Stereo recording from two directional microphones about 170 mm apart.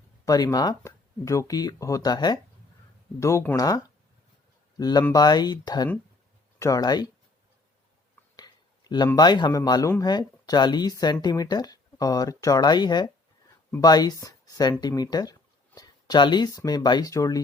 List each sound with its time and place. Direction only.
0.3 s speech: 20° left (ahead or behind)
4.8 s speech: 25° left (ahead or behind)
8.4 s a sound: 25° left (ahead or behind)
9.1 s speech: 25° left (ahead or behind)